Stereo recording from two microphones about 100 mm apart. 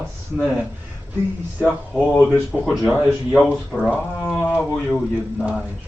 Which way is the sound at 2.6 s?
Centre (ahead or behind).